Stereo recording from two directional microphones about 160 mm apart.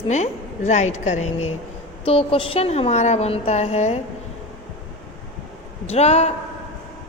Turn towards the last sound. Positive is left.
turn(degrees=40)  # may be behind; listen again after turning